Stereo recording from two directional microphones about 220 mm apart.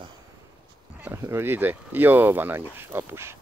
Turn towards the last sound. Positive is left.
turn(degrees=-10)  # may be behind; listen again after turning